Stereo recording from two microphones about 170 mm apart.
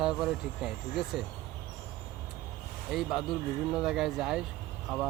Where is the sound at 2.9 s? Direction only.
Centre (ahead or behind).